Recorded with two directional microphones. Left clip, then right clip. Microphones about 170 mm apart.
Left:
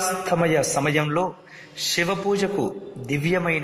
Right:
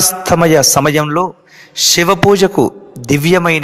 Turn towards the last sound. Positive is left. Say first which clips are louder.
# right 12 dB
turn(degrees=-40)  # may be behind; listen again after turning